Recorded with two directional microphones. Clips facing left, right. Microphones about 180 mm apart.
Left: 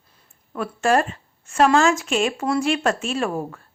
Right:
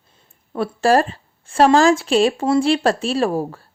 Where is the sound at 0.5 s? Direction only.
30° right (ahead or behind).